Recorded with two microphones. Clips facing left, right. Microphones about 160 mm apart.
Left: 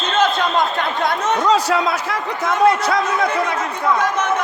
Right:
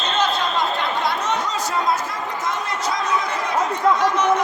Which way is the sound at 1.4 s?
75° left (ahead or behind).